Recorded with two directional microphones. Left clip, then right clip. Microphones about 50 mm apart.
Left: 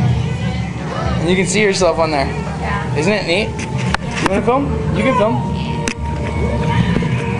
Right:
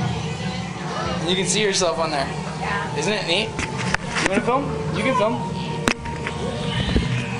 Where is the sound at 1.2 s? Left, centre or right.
Centre.